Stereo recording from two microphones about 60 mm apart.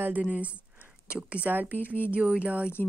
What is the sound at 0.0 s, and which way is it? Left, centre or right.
Speech, right.